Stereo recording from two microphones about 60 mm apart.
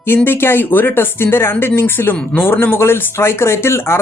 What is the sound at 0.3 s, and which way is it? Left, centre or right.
Speech, left.